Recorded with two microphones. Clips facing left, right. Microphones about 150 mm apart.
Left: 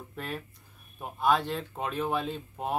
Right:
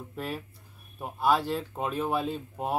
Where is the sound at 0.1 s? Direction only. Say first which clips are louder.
Right 2 dB; 5° right (ahead or behind).